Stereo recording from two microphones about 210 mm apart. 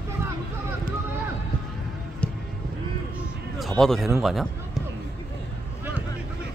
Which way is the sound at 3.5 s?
Centre (ahead or behind).